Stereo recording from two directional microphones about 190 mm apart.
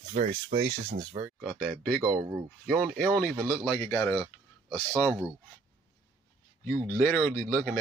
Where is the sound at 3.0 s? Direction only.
5° left (ahead or behind).